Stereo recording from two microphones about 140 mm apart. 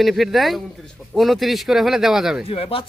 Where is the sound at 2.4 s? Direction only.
45° left (ahead or behind).